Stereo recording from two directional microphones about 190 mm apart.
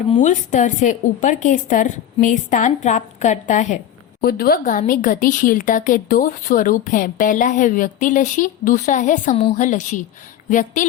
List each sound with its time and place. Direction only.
0.2 s a woman's voice: 40° left (ahead or behind)
4.2 s a woman's voice: 55° left (ahead or behind)